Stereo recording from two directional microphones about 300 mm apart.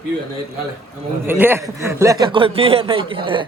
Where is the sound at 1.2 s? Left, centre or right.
Centre.